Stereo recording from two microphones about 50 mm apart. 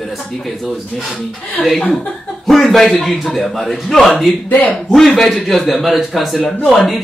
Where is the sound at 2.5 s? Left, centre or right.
Centre.